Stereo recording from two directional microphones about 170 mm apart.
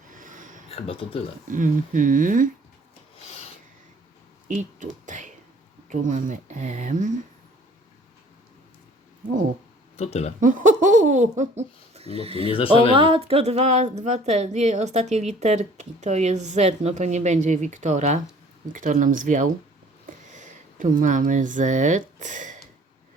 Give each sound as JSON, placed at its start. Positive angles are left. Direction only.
{"t": 0.1, "sound": "a sound", "side_deg": -50}
{"t": 0.9, "sound": "speech", "side_deg": 30}
{"t": 1.5, "sound": "speech", "side_deg": -50}
{"t": 3.2, "sound": "filing", "side_deg": 40}
{"t": 4.4, "sound": "speech", "side_deg": -45}
{"t": 10.0, "sound": "speech", "side_deg": 40}
{"t": 10.4, "sound": "speech", "side_deg": -50}
{"t": 12.5, "sound": "speech", "side_deg": 30}
{"t": 13.0, "sound": "a woman's voice", "side_deg": -30}